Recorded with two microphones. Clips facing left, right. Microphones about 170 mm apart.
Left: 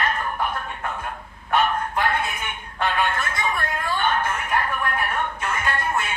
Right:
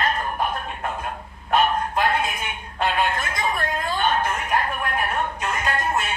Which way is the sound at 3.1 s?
20° right (ahead or behind).